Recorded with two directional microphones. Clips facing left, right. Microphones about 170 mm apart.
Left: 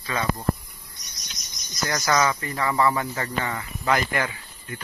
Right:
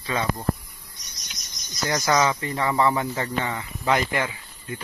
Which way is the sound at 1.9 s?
15° right (ahead or behind).